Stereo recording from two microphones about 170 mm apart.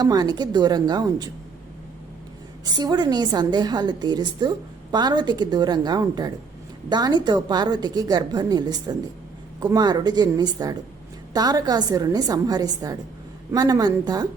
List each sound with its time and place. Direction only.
0.0 s a woman's voice: 25° right (ahead or behind)
2.6 s a woman's voice: 25° right (ahead or behind)